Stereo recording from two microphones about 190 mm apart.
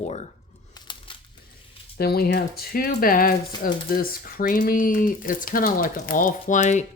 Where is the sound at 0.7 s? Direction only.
25° left (ahead or behind).